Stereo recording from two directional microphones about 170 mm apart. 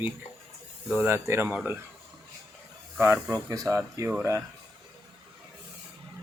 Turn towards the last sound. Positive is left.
turn(degrees=-15)  # may be behind; listen again after turning